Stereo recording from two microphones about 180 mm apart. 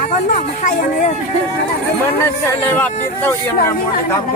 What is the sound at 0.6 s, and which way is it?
Speech, 45° left (ahead or behind).